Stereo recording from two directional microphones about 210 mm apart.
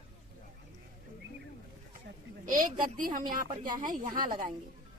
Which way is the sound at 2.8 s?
40° right (ahead or behind).